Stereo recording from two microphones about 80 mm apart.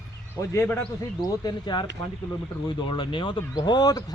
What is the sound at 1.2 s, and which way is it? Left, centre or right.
Speech, left.